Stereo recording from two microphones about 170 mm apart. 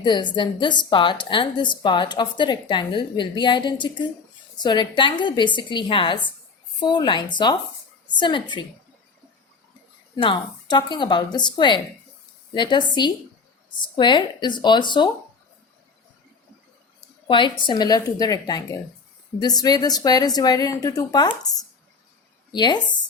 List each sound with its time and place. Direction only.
0.0 s a woman's voice: 25° left (ahead or behind)
10.2 s a woman's voice: 25° left (ahead or behind)
17.2 s a woman's voice: 30° left (ahead or behind)